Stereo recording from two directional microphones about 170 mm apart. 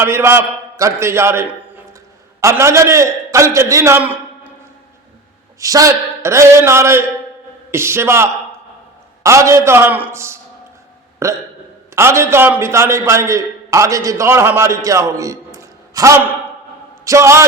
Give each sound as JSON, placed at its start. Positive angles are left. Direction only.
{"t": 0.0, "sound": "a man's voice", "side_deg": -15}
{"t": 5.5, "sound": "a man's voice", "side_deg": -20}